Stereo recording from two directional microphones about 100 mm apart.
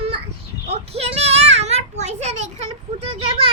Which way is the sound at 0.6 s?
90° right.